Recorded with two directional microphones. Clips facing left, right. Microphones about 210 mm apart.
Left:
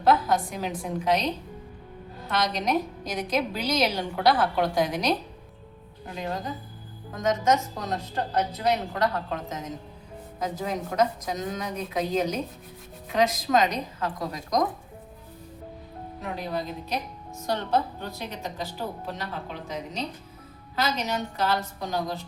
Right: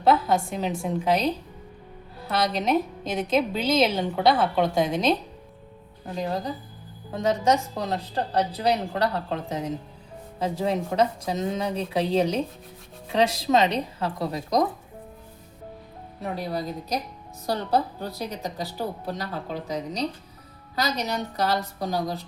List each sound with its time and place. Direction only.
0.0 s a woman's voice: 25° right (ahead or behind)
2.2 s a woman's voice: 30° right (ahead or behind)
7.1 s a woman's voice: 30° right (ahead or behind)
16.2 s a woman's voice: 35° right (ahead or behind)